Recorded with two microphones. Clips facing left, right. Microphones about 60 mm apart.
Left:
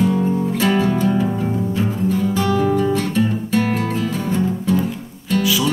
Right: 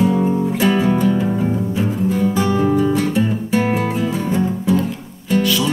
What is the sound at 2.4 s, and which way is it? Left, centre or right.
Music, centre.